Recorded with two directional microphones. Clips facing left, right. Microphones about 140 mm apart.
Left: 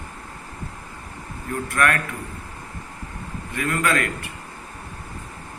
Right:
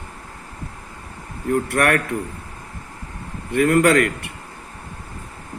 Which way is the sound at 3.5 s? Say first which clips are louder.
Right 9 dB; 65° right (ahead or behind).